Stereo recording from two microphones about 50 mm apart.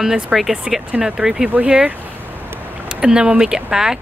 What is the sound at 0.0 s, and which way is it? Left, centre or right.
Speech, centre.